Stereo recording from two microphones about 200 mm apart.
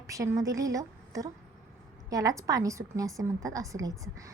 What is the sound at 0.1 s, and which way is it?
A woman's voice, 15° right (ahead or behind).